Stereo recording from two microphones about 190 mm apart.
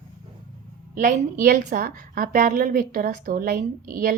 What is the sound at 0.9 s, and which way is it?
A woman's voice, 40° right (ahead or behind).